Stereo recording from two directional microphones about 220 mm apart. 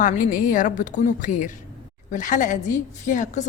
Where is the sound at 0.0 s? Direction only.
35° left (ahead or behind).